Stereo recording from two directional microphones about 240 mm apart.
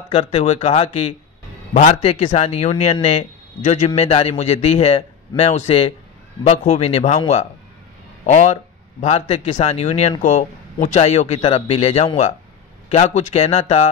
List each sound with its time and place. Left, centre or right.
0.1 s speech: left